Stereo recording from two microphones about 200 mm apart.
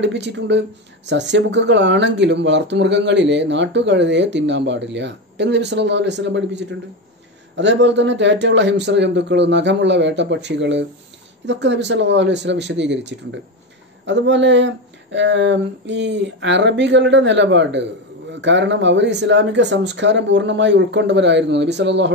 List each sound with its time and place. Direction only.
0.0 s speech: 60° right (ahead or behind)